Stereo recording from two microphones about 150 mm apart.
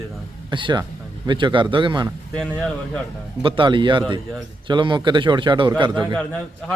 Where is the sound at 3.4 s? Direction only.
35° right (ahead or behind).